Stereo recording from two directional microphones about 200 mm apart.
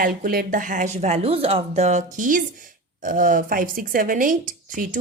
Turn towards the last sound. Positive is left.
turn(degrees=-40)  # may be behind; listen again after turning